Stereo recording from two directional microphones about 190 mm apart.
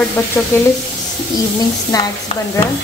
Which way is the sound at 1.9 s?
15° left (ahead or behind).